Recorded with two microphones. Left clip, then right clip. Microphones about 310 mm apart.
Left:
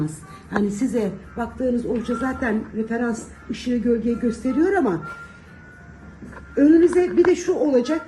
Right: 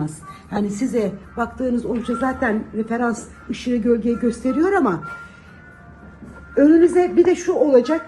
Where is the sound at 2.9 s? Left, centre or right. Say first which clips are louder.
Right 5 dB; centre.